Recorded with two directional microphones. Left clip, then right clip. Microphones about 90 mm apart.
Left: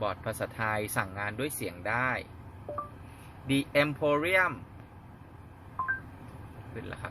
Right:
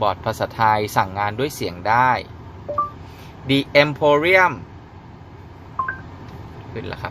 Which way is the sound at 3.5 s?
15° right (ahead or behind).